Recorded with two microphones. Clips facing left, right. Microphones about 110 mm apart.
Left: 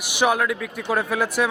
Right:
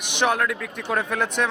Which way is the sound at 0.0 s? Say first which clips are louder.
Left 2 dB; 5° left (ahead or behind).